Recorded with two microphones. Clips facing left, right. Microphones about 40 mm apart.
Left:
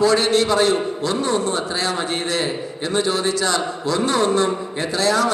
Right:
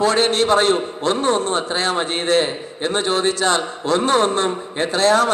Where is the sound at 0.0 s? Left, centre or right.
Right.